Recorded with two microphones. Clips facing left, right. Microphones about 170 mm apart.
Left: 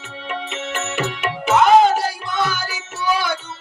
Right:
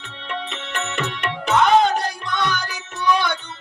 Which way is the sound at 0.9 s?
5° left (ahead or behind).